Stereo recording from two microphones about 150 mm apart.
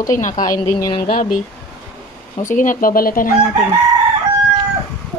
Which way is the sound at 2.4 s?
60° left (ahead or behind).